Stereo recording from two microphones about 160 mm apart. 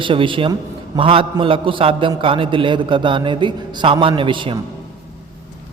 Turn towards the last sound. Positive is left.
turn(degrees=-30)  # may be behind; listen again after turning